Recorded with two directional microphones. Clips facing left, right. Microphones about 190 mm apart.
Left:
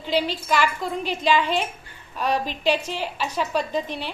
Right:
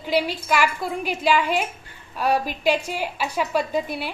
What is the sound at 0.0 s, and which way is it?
A woman's voice, 10° right (ahead or behind).